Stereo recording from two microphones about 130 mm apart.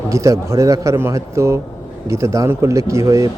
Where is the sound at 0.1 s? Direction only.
25° right (ahead or behind).